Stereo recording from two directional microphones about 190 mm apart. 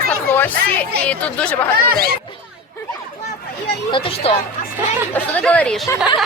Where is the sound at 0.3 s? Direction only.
10° left (ahead or behind).